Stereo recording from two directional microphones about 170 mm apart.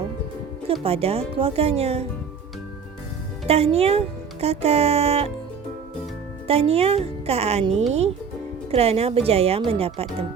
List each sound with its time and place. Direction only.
0.7 s speech: 35° right (ahead or behind)
3.4 s speech: 35° right (ahead or behind)
6.5 s speech: 35° right (ahead or behind)
8.7 s speech: 35° right (ahead or behind)